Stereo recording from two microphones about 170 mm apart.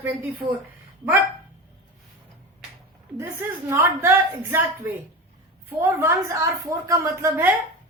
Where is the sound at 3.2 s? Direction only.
15° right (ahead or behind).